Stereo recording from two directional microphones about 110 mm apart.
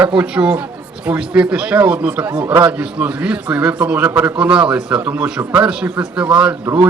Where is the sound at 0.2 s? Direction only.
10° right (ahead or behind).